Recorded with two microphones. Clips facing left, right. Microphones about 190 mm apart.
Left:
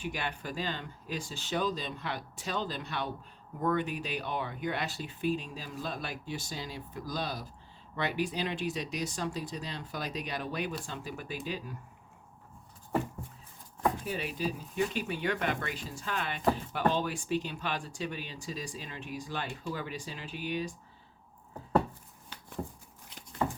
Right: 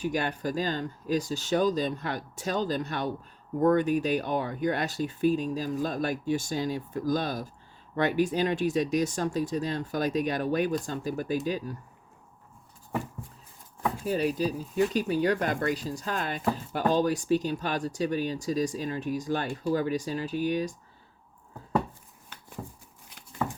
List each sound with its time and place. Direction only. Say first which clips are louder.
0.0 s speech: right 8 dB; 40° right (ahead or behind)
14.0 s speech: right 8 dB; 40° right (ahead or behind)